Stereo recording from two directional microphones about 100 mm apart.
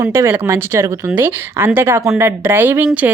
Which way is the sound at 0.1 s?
25° right (ahead or behind).